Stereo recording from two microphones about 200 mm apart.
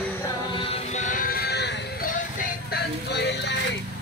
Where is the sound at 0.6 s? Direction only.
35° left (ahead or behind); by 2.1 s 55° left (ahead or behind).